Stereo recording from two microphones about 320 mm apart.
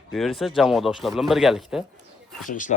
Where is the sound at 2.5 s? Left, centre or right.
Left.